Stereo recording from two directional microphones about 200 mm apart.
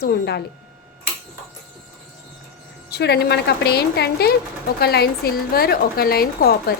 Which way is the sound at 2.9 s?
55° left (ahead or behind).